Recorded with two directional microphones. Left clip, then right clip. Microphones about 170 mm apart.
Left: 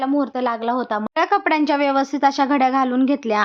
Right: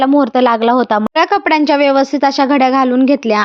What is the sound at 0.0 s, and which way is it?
A woman's voice, 50° right (ahead or behind).